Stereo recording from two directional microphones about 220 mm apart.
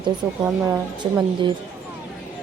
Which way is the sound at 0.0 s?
15° right (ahead or behind).